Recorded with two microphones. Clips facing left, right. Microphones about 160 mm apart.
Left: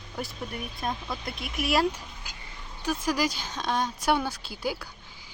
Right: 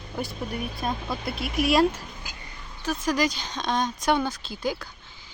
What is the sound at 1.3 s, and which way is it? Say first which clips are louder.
Speech: right 6 dB; 60° right (ahead or behind).